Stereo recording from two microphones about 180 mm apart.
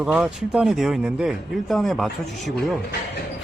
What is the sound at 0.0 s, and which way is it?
Speech, 5° right (ahead or behind).